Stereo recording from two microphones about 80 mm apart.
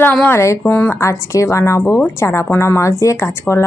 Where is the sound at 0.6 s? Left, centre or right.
Left.